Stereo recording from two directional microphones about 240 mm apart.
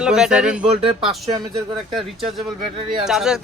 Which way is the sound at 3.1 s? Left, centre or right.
Centre.